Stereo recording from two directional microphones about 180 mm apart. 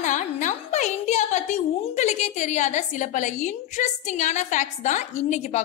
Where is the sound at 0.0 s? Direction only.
45° left (ahead or behind).